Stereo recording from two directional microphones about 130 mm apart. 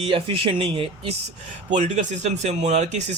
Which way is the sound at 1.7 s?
70° right (ahead or behind).